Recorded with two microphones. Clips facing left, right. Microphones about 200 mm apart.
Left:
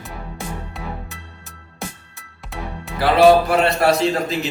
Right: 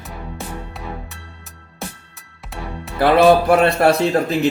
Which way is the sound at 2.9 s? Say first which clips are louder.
Even; 55° right (ahead or behind).